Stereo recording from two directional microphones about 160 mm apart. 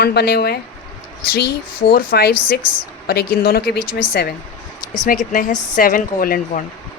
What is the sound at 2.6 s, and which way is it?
Speech, 30° left (ahead or behind).